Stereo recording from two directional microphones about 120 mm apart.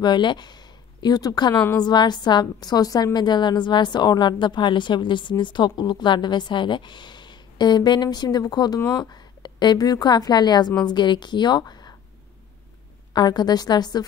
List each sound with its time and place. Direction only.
0.0 s a woman's voice: 40° left (ahead or behind)
13.1 s a woman's voice: 35° left (ahead or behind)